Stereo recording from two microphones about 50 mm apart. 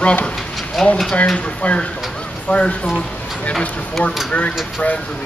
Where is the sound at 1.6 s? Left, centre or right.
Left.